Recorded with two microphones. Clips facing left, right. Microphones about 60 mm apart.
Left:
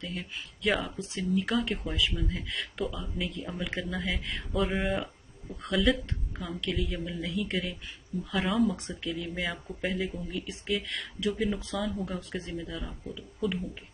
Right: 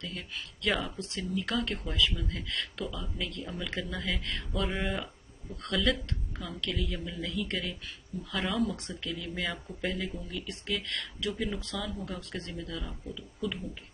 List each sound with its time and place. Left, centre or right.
0.0 s speech: centre
5.0 s speech: centre